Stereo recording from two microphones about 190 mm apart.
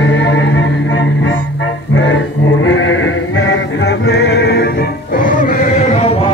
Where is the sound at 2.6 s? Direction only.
80° left; by 6.2 s 35° left (ahead or behind).